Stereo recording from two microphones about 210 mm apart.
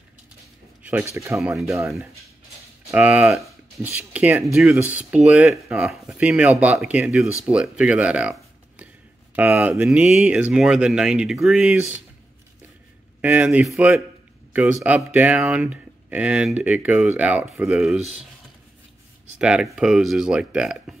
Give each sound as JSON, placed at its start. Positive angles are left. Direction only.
{"t": 0.8, "sound": "speech", "side_deg": -10}
{"t": 13.2, "sound": "speech", "side_deg": -5}
{"t": 19.3, "sound": "speech", "side_deg": -5}